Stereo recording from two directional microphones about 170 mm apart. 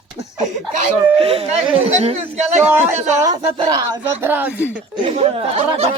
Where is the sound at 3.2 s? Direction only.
20° right (ahead or behind).